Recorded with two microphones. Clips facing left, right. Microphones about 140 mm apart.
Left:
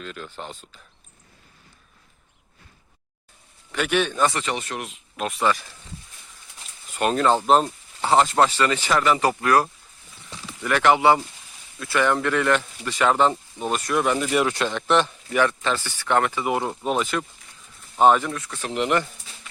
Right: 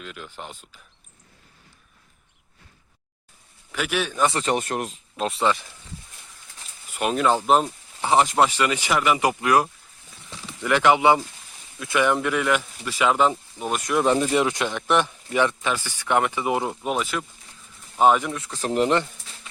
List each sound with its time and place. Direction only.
0.0 s speech: 10° right (ahead or behind)
3.7 s a man's voice: 5° right (ahead or behind)
4.3 s speech: 40° right (ahead or behind)
5.1 s speech: 30° right (ahead or behind)
6.9 s speech: 5° right (ahead or behind)
13.8 s speech: 25° right (ahead or behind)
16.6 s speech: 5° right (ahead or behind)
18.3 s speech: 25° right (ahead or behind)
18.6 s speech: 40° right (ahead or behind)